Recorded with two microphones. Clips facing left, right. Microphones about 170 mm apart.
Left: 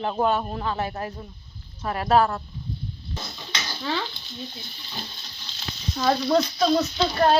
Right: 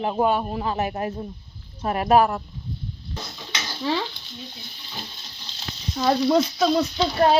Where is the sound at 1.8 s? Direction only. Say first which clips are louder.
Right 2 dB; 20° right (ahead or behind).